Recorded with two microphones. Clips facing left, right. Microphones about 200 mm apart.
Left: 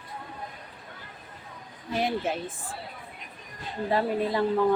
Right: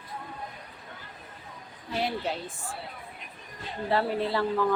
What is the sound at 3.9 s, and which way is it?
Speech, 15° left (ahead or behind).